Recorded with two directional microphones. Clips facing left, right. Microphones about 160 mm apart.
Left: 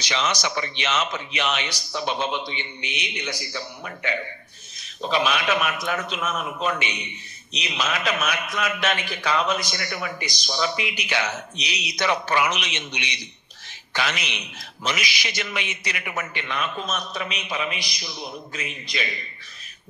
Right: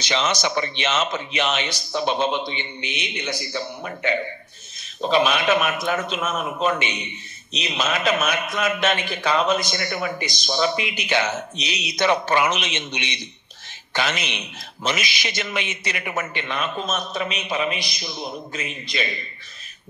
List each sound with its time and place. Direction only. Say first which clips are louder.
0.0 s a man's voice: right 3 dB; 25° right (ahead or behind)